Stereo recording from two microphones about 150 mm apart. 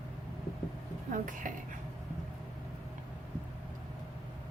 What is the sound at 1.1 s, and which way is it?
Speech, 60° right (ahead or behind).